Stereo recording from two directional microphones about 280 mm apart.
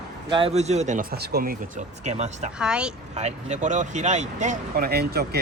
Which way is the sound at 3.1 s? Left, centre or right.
Right.